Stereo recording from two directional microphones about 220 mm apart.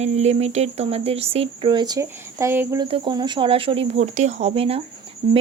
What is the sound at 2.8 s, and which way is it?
Speech, 25° right (ahead or behind).